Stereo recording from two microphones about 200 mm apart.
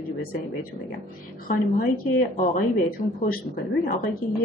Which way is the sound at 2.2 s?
40° left (ahead or behind).